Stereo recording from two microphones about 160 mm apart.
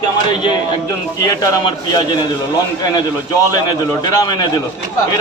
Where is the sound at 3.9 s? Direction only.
25° left (ahead or behind).